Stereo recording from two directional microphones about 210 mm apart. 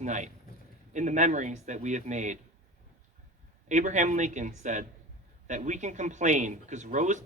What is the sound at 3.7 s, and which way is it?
Speech, 35° right (ahead or behind).